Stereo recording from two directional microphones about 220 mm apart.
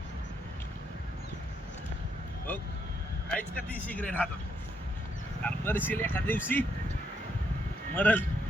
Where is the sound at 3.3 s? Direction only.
5° left (ahead or behind).